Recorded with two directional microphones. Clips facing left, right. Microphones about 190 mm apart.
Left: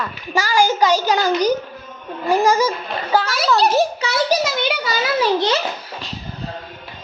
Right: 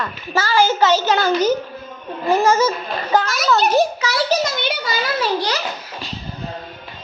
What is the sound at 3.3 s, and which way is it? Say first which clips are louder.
A child's voice: even; 30° left (ahead or behind).